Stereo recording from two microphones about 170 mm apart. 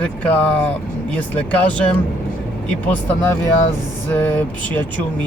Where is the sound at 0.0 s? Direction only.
10° left (ahead or behind).